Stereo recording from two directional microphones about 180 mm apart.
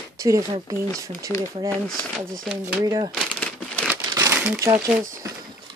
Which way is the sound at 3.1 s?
5° left (ahead or behind).